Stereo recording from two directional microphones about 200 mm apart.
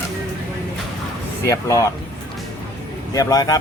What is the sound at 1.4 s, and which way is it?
Speech, 15° left (ahead or behind).